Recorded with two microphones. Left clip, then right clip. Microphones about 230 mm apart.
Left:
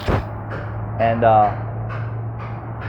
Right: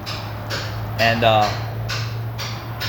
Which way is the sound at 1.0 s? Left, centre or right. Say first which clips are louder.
Left 2 dB; right.